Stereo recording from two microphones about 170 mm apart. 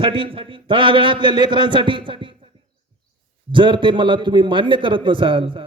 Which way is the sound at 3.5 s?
30° right (ahead or behind).